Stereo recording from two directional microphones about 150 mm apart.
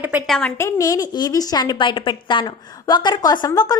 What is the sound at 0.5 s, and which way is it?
A woman's voice, 20° left (ahead or behind).